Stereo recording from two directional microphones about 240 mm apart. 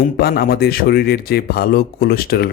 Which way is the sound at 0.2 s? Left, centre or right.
Left.